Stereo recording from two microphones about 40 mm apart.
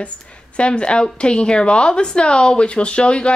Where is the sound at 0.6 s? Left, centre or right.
Left.